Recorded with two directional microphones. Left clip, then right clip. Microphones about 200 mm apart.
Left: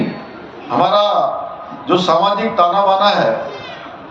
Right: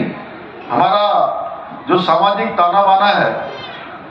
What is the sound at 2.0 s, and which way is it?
A man's voice, 35° left (ahead or behind).